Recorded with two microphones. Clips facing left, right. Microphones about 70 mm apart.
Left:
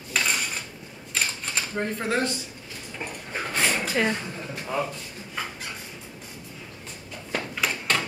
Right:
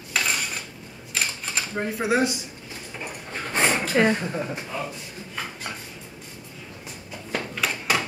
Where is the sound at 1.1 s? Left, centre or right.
Centre.